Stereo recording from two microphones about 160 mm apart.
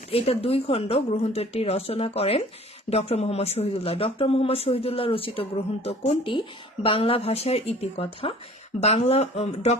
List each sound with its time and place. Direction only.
0.1 s speech: 35° left (ahead or behind)